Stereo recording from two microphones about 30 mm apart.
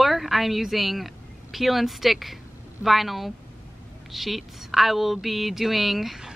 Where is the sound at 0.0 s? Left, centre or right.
Centre.